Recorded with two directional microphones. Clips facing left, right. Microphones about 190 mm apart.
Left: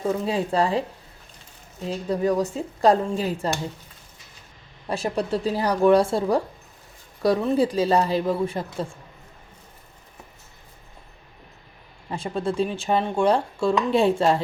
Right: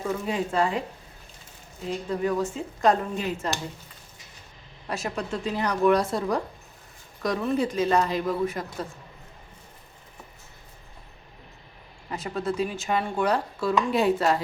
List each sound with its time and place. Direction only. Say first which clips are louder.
0.3 s speech: left 1 dB; 35° left (ahead or behind)
2.0 s speech: left 4 dB; 35° left (ahead or behind)
4.9 s speech: left 5 dB; 30° left (ahead or behind)
12.1 s speech: left 3 dB; 30° left (ahead or behind)